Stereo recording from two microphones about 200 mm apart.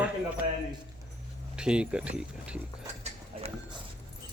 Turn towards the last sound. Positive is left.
turn(degrees=-35)  # may be behind; listen again after turning